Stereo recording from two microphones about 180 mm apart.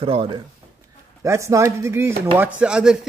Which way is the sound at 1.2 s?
15° right (ahead or behind).